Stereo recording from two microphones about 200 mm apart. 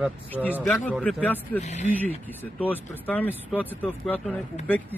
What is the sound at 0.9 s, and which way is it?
Speech, 5° left (ahead or behind).